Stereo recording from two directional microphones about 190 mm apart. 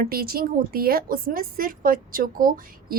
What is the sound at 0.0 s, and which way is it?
A woman's voice, 50° right (ahead or behind).